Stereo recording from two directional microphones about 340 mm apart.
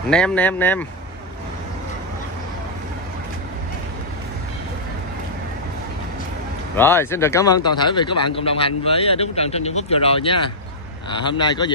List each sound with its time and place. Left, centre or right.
0.1 s speech: centre
6.8 s a man's voice: centre